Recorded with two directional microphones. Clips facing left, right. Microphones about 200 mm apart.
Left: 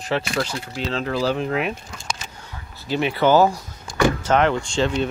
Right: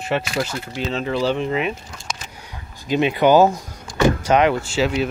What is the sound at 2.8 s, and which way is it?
Speech, 15° right (ahead or behind).